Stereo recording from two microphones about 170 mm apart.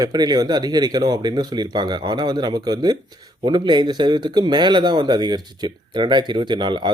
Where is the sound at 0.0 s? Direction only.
25° right (ahead or behind).